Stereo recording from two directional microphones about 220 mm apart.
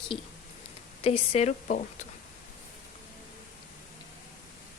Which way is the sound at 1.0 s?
25° left (ahead or behind).